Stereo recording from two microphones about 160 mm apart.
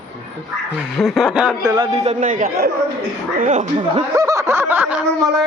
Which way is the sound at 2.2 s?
55° right (ahead or behind).